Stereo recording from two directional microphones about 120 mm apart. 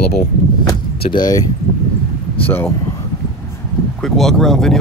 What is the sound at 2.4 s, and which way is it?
Speech, 20° left (ahead or behind).